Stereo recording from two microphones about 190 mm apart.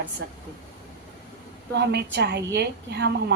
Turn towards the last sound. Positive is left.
turn(degrees=-60)  # may be behind; listen again after turning